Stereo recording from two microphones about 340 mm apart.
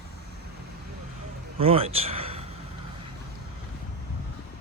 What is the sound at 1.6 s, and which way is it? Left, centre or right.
Speech, centre.